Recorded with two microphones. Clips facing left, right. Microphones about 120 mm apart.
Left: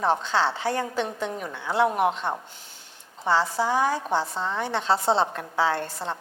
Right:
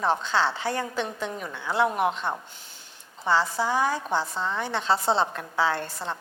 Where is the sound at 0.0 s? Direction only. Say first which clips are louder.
Left 1 dB; 35° left (ahead or behind).